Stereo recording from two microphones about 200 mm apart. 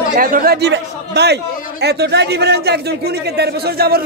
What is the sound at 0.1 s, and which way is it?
A man's voice, 45° right (ahead or behind).